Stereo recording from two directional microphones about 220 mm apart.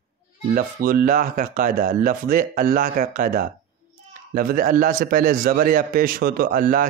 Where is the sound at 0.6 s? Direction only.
40° right (ahead or behind).